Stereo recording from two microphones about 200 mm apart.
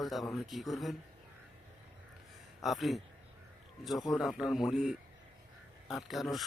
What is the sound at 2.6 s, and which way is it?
A man's voice, centre (ahead or behind).